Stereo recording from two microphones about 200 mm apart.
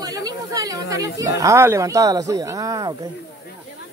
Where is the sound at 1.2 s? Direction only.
15° right (ahead or behind).